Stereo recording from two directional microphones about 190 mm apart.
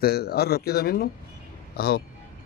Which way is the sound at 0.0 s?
55° left (ahead or behind).